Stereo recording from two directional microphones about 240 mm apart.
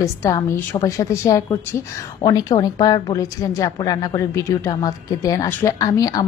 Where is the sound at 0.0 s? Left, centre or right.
Centre.